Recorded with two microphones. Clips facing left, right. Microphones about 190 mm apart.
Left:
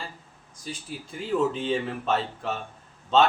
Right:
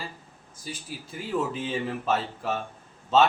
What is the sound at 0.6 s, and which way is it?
Speech, 5° right (ahead or behind).